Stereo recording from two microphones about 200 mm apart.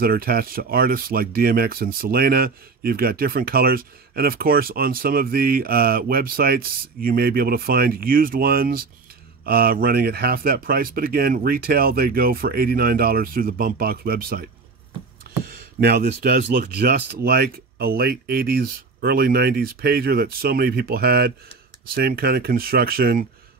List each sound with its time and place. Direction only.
0.0 s speech: 50° right (ahead or behind)
15.8 s speech: 50° right (ahead or behind)